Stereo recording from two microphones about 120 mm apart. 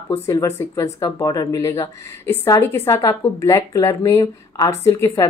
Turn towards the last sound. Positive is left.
turn(degrees=25)  # may be behind; listen again after turning